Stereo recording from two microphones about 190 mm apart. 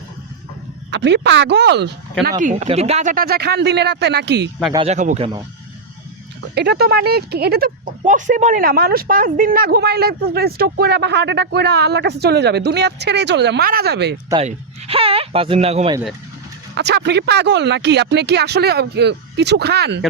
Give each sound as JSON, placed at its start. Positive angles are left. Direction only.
{"t": 0.9, "sound": "speech", "side_deg": -65}
{"t": 2.4, "sound": "speech", "side_deg": -40}
{"t": 4.9, "sound": "speech", "side_deg": -35}
{"t": 6.5, "sound": "speech", "side_deg": -60}
{"t": 14.4, "sound": "speech", "side_deg": -30}
{"t": 16.7, "sound": "speech", "side_deg": -60}